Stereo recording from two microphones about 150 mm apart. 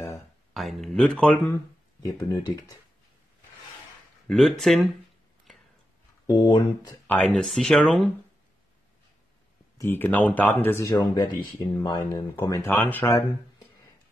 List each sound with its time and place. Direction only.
0.6 s speech: centre (ahead or behind)
2.2 s speech: 25° left (ahead or behind)
4.3 s speech: centre (ahead or behind)
6.4 s speech: 25° left (ahead or behind)
7.1 s speech: 5° left (ahead or behind)
9.8 s speech: 15° left (ahead or behind)
12.6 s speech: 10° left (ahead or behind)
13.1 s speech: 25° left (ahead or behind)